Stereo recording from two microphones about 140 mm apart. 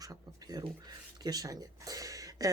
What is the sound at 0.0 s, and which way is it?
Speech, 25° right (ahead or behind).